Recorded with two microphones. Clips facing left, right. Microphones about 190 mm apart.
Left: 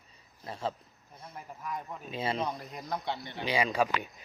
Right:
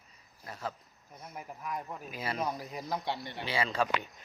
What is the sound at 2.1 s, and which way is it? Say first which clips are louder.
Speech: left 5 dB; 25° left (ahead or behind).